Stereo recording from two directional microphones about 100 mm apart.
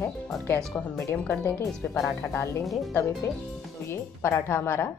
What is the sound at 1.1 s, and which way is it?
Speech, 15° left (ahead or behind).